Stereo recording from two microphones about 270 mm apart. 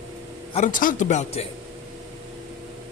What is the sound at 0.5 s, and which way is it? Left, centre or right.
Speech, left.